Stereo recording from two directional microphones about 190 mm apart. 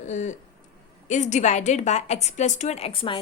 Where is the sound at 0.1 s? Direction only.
40° left (ahead or behind).